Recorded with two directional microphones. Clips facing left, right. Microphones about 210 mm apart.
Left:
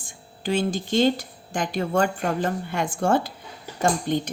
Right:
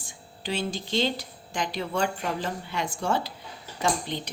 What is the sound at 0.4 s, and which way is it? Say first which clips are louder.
Speech: left 6 dB; 50° left (ahead or behind).